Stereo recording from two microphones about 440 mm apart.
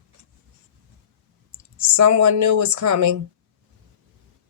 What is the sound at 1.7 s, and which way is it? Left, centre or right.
Speech, right.